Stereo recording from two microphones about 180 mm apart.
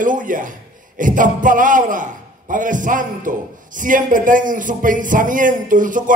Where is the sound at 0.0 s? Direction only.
45° right (ahead or behind).